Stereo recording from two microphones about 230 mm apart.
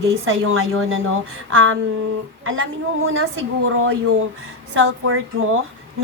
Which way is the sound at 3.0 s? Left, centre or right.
Right.